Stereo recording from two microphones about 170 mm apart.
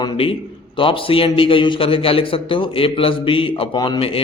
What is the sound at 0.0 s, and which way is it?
A man's voice, 30° left (ahead or behind).